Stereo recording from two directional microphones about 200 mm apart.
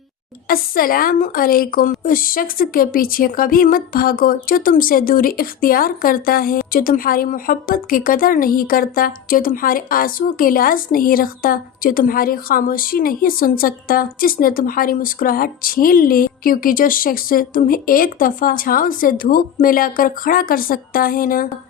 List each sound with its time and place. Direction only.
0.4 s a woman's voice: 45° left (ahead or behind)